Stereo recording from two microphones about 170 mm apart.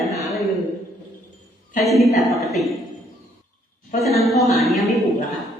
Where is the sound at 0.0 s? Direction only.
Centre (ahead or behind).